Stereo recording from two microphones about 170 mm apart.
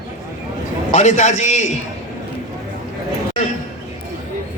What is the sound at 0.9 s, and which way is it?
Speech, 45° left (ahead or behind).